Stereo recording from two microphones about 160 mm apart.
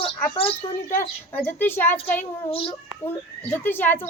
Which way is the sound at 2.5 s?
35° left (ahead or behind).